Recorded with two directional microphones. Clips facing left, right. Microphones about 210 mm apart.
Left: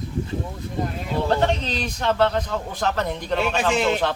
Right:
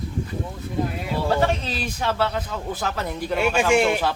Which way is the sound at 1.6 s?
5° right (ahead or behind).